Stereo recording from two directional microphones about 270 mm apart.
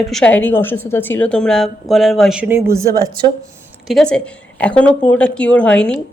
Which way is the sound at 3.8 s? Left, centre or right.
Centre.